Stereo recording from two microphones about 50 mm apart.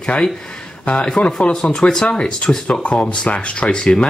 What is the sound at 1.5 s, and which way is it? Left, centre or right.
Speech, centre.